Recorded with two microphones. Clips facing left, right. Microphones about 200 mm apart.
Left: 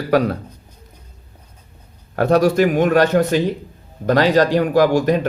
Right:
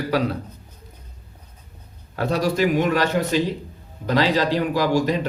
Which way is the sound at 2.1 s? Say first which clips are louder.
Left 7 dB; 50° left (ahead or behind).